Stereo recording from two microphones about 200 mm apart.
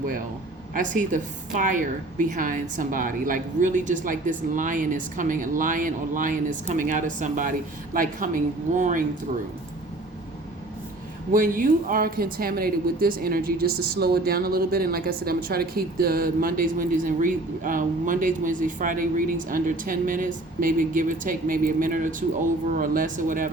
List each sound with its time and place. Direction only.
0.7 s a woman's voice: 40° right (ahead or behind)
11.3 s speech: 45° right (ahead or behind)